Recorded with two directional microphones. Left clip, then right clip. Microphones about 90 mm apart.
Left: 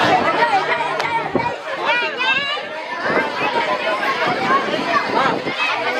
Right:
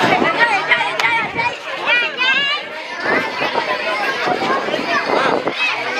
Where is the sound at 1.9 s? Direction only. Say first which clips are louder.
Right 3 dB; 30° right (ahead or behind).